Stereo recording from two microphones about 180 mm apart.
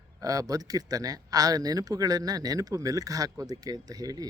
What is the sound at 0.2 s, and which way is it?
Speech, 20° right (ahead or behind).